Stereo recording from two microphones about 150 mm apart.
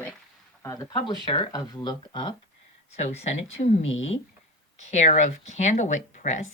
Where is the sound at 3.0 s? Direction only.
45° left (ahead or behind).